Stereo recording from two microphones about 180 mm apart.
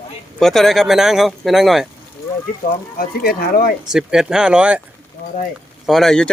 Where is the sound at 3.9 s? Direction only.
5° right (ahead or behind).